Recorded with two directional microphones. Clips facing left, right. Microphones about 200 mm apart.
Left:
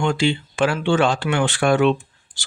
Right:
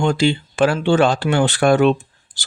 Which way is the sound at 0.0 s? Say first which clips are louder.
Right 3 dB; 40° right (ahead or behind).